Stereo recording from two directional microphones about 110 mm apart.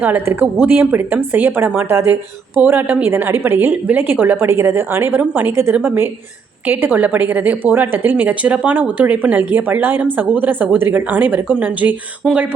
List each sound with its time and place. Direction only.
0.0 s a woman's voice: 20° right (ahead or behind)